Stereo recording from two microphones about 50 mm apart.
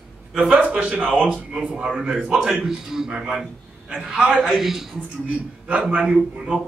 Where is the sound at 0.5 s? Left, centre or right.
Right.